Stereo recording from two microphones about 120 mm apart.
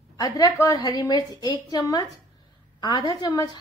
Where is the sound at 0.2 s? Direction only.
30° left (ahead or behind).